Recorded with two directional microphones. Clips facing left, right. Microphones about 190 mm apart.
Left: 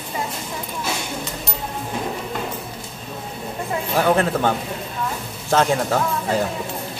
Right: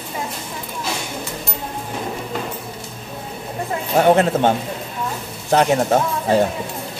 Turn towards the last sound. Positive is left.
turn(degrees=-25)  # may be behind; listen again after turning